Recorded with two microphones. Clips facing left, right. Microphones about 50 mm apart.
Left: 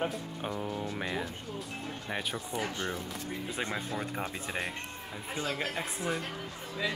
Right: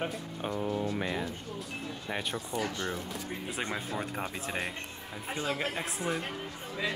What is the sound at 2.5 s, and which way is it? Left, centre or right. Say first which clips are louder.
Speech: right 1 dB; centre.